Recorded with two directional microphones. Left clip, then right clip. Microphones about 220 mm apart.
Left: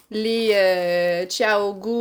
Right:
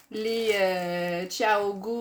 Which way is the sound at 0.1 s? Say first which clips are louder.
Left 6 dB; 40° left (ahead or behind).